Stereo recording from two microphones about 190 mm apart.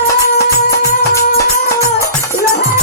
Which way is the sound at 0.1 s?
15° left (ahead or behind).